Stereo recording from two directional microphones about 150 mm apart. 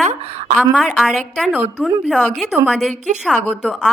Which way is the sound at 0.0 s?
50° right (ahead or behind).